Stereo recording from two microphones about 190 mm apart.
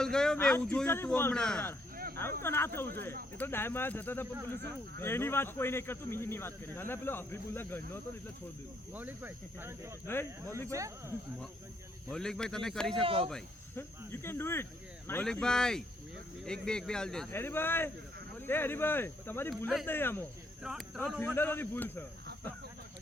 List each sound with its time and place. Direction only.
0.0 s speech: 5° left (ahead or behind)
8.9 s speech: 10° right (ahead or behind)
10.1 s speech: 10° left (ahead or behind)
10.7 s speech: 15° right (ahead or behind)
12.1 s speech: 5° left (ahead or behind)
12.9 s speech: 30° right (ahead or behind)
13.7 s speech: 10° left (ahead or behind)
19.6 s speech: centre (ahead or behind)
19.9 s speech: 10° left (ahead or behind)
20.6 s speech: 5° right (ahead or behind)
21.2 s speech: 10° left (ahead or behind)